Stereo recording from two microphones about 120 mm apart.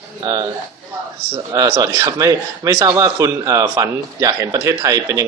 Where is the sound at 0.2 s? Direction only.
30° right (ahead or behind).